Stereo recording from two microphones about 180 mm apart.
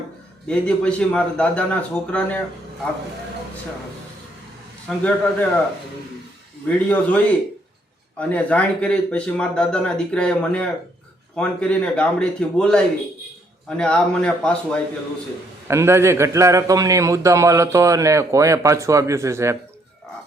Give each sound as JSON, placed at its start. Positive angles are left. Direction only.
{"t": 0.4, "sound": "speech", "side_deg": 5}
{"t": 4.9, "sound": "speech", "side_deg": 5}
{"t": 6.7, "sound": "speech", "side_deg": 10}
{"t": 8.2, "sound": "speech", "side_deg": 10}
{"t": 15.6, "sound": "a man's voice", "side_deg": -15}